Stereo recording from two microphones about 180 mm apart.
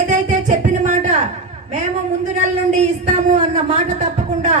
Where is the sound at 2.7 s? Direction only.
45° right (ahead or behind).